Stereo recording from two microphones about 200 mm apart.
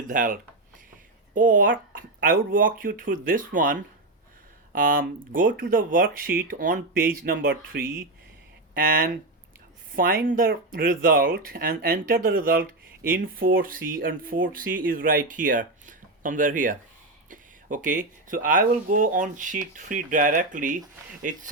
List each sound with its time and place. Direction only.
0.1 s speech: 45° right (ahead or behind)
8.7 s speech: 45° right (ahead or behind)